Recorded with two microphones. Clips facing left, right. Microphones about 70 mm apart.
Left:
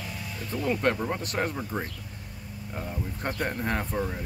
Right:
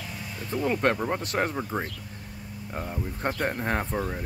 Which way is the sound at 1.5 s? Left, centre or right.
Centre.